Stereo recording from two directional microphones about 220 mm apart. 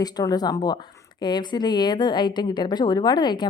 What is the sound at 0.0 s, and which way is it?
A woman's voice, 20° left (ahead or behind).